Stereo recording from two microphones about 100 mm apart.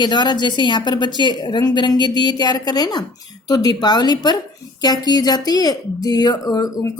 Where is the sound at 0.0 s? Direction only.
50° left (ahead or behind).